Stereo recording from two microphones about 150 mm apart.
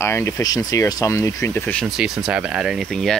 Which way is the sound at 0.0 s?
20° left (ahead or behind).